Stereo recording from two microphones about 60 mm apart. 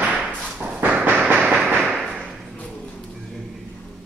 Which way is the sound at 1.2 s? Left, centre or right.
Centre.